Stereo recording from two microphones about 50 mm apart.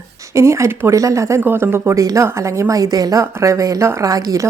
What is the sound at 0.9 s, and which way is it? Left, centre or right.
Speech, right.